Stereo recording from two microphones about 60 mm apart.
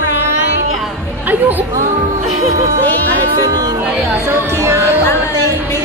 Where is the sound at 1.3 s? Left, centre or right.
Right.